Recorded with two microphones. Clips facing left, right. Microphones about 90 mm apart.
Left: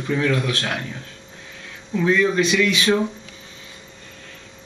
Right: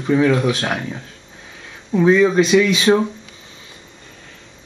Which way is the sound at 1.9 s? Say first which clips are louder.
Right 5 dB; 20° right (ahead or behind).